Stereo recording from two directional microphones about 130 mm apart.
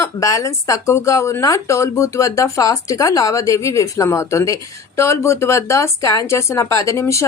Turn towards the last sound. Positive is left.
turn(degrees=20)  # may be behind; listen again after turning